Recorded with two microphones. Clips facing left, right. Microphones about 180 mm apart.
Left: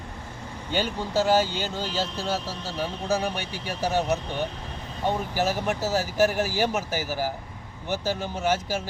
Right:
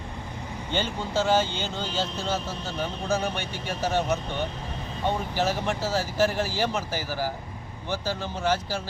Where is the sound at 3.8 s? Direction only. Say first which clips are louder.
Left 1 dB; 15° left (ahead or behind).